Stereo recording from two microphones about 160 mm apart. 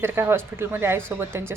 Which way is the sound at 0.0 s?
15° right (ahead or behind).